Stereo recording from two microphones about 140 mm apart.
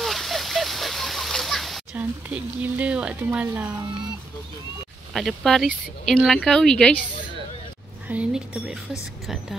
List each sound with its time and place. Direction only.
0.0 s a sound: centre (ahead or behind)
2.0 s speech: 10° right (ahead or behind)
5.1 s speech: centre (ahead or behind)
8.1 s speech: 10° right (ahead or behind)